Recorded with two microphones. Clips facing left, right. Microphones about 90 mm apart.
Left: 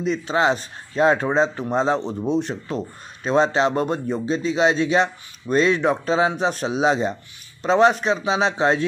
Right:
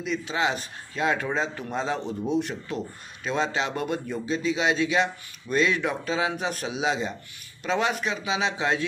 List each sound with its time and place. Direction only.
0.0 s speech: 40° left (ahead or behind)